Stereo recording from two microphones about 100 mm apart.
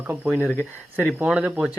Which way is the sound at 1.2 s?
5° right (ahead or behind).